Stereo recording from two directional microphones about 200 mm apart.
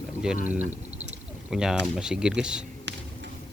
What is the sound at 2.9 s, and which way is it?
Basketball bounce, 60° right (ahead or behind).